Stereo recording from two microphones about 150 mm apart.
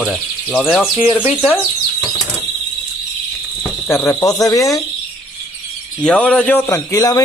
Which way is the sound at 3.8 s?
20° left (ahead or behind).